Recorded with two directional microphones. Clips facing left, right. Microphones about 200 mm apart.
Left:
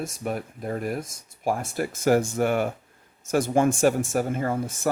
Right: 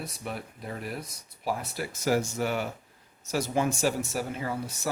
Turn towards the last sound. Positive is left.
turn(degrees=50)  # may be behind; listen again after turning